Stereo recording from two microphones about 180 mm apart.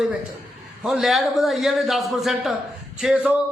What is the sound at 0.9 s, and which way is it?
A man's voice, centre (ahead or behind).